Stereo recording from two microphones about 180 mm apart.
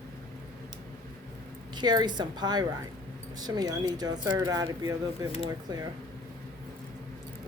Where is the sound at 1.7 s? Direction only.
25° right (ahead or behind).